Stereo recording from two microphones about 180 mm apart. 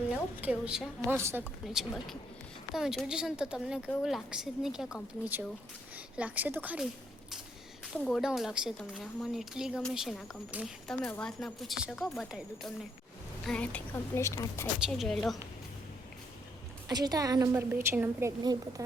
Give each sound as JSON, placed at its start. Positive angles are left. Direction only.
{"t": 0.1, "sound": "a woman's voice", "side_deg": -5}
{"t": 1.6, "sound": "a woman's voice", "side_deg": 0}
{"t": 8.0, "sound": "a woman's voice", "side_deg": 0}
{"t": 14.8, "sound": "a woman's voice", "side_deg": 0}
{"t": 16.9, "sound": "a woman's voice", "side_deg": -20}